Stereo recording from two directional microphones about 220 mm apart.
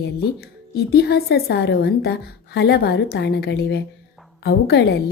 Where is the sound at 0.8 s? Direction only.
45° left (ahead or behind).